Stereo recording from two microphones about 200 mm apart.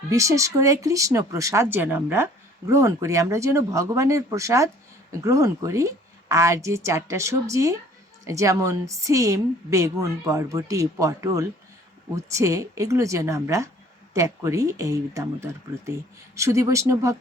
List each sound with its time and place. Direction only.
0.1 s speech: 15° right (ahead or behind)